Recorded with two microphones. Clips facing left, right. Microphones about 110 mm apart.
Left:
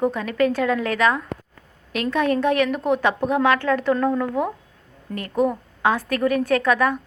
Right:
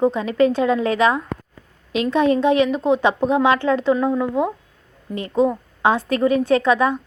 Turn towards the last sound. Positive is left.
turn(degrees=-25)  # may be behind; listen again after turning